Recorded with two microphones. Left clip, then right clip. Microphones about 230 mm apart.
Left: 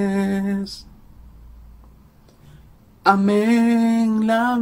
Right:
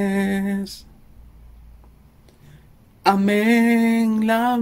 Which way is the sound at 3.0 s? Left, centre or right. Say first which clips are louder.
Left 1 dB; right.